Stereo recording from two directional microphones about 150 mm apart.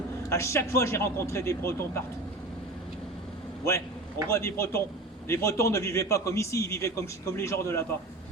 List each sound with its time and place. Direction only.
0.3 s a man's voice: 20° left (ahead or behind)
3.6 s a man's voice: 20° left (ahead or behind)